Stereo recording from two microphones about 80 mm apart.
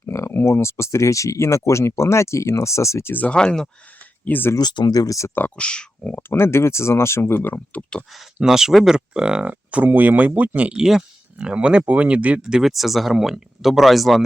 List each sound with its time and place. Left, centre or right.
0.0 s speech: left
3.1 s speech: left
3.3 s speech: centre
4.3 s speech: left
4.6 s speech: left
4.9 s speech: left
5.5 s speech: centre
6.1 s speech: left
7.5 s speech: centre
8.4 s speech: centre
12.4 s speech: centre